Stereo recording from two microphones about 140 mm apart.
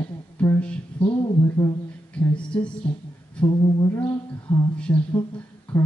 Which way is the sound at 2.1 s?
10° left (ahead or behind).